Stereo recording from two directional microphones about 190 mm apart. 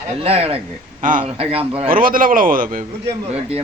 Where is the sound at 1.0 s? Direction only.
45° right (ahead or behind).